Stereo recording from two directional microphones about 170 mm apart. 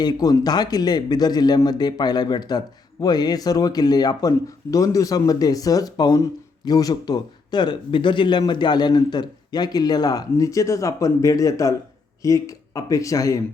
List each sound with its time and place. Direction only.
0.0 s speech: 25° left (ahead or behind)